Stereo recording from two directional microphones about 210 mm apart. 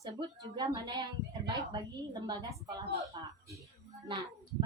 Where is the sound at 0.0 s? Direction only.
20° right (ahead or behind).